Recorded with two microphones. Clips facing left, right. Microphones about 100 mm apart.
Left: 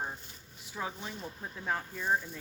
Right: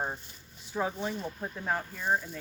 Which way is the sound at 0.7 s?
20° right (ahead or behind).